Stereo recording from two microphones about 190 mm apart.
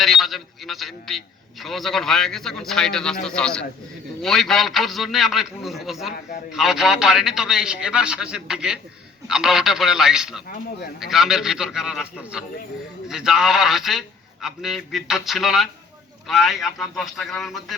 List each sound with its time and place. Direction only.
0.0 s a man's voice: centre (ahead or behind)